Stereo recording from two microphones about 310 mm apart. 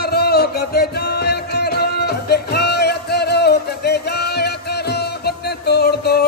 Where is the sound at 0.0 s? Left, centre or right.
Left.